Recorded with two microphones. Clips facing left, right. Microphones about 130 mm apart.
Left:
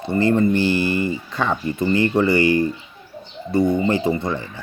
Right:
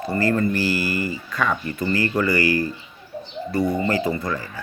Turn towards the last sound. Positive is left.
turn(degrees=25)  # may be behind; listen again after turning